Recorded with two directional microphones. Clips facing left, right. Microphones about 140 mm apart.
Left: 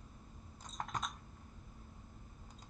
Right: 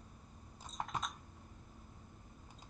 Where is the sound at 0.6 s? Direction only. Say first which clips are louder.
Right 1 dB; centre (ahead or behind).